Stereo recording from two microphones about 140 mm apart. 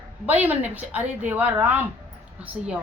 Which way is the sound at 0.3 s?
10° right (ahead or behind).